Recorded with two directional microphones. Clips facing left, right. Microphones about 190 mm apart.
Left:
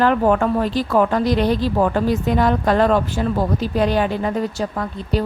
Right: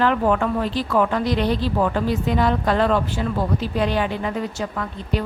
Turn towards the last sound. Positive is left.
turn(degrees=35)  # may be behind; listen again after turning